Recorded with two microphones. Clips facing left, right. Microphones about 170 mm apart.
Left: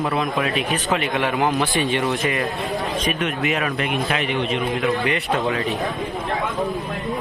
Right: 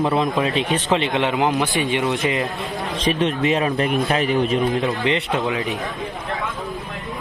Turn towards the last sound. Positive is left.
turn(degrees=-20)  # may be behind; listen again after turning